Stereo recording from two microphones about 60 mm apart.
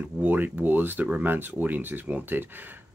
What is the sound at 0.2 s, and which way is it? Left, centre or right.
Speech, right.